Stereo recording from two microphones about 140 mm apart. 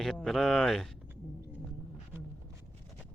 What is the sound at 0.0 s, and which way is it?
Speech, 5° left (ahead or behind).